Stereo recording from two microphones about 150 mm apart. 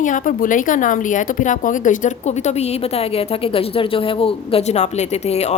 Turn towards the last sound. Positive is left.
turn(degrees=45)  # may be behind; listen again after turning